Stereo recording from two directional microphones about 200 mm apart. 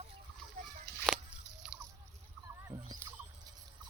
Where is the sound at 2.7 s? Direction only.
15° right (ahead or behind).